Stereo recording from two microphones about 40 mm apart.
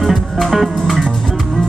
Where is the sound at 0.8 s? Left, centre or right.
Centre.